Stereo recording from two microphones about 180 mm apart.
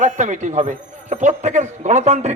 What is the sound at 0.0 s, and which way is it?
A man's voice, 45° right (ahead or behind).